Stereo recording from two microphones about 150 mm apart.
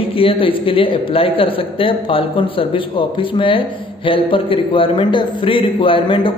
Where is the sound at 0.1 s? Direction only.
35° left (ahead or behind).